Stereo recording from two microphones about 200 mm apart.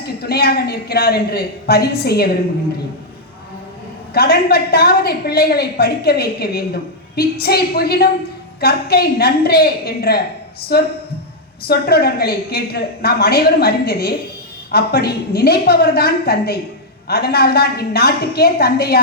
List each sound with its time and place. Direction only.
0.0 s a woman's voice: 50° left (ahead or behind)
4.1 s a woman's voice: 50° left (ahead or behind)